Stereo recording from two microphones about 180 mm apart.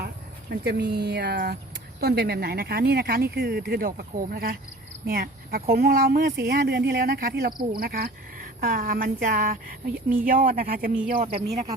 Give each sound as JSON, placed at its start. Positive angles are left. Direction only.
{"t": 0.5, "sound": "speech", "side_deg": -60}
{"t": 11.2, "sound": "speech", "side_deg": -40}